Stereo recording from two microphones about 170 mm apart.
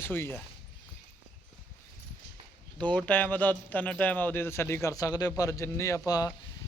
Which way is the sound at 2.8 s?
5° left (ahead or behind).